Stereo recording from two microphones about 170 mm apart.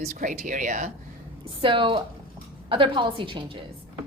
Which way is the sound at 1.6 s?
30° right (ahead or behind).